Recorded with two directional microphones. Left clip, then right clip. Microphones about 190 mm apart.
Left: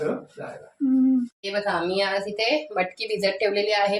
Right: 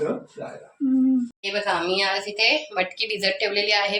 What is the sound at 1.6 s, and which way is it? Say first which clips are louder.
A woman's voice: right 2 dB; 45° left (ahead or behind).